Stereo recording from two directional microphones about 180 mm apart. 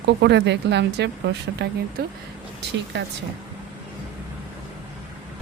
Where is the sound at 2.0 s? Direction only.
60° right (ahead or behind).